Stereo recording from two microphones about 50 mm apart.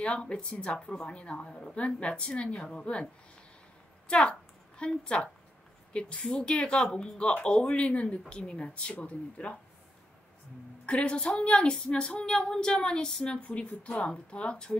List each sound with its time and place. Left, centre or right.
0.0 s a woman's voice: left
4.1 s a woman's voice: left
10.9 s a woman's voice: left